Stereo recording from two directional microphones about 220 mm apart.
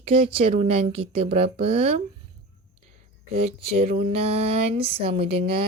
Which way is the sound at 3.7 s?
25° right (ahead or behind).